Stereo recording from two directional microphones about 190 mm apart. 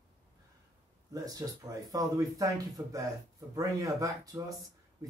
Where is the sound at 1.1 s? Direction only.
20° right (ahead or behind).